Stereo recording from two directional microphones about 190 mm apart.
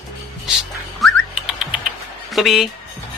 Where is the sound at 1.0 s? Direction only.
5° right (ahead or behind).